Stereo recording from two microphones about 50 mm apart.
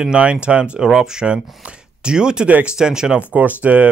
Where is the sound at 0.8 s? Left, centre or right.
Centre.